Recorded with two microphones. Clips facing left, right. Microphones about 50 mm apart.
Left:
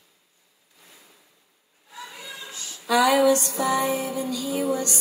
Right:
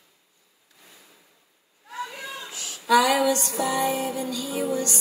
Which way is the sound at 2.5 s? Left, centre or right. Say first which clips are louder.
Right 2 dB; right.